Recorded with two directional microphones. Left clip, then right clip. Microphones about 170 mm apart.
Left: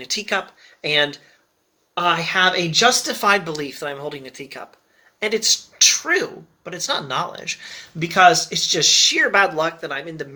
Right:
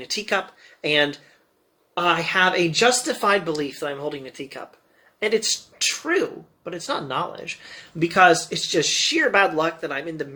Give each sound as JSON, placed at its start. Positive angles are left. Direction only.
{"t": 0.0, "sound": "speech", "side_deg": 10}